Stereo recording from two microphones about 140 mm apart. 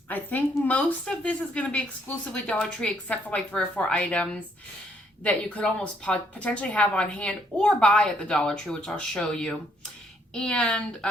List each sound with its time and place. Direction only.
0.1 s a woman's voice: 10° left (ahead or behind)